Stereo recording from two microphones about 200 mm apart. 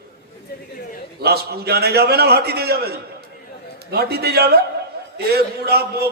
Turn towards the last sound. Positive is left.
turn(degrees=-55)  # may be behind; listen again after turning